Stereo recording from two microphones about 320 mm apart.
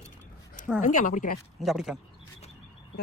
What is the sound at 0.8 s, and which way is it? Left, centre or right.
Speech, left.